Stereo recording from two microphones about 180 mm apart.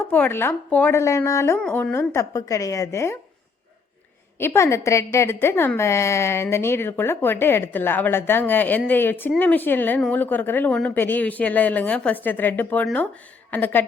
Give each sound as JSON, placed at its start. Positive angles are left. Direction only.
{"t": 0.0, "sound": "a woman's voice", "side_deg": 10}
{"t": 4.4, "sound": "a woman's voice", "side_deg": 15}